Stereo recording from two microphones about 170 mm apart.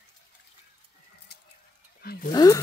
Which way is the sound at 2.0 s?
60° left (ahead or behind).